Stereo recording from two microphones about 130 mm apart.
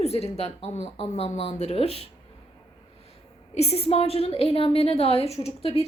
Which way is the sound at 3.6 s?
50° left (ahead or behind).